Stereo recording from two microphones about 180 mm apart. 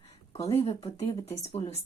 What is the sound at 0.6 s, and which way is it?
Speech, 25° left (ahead or behind).